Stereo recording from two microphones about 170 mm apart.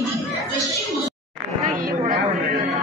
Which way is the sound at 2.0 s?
50° right (ahead or behind).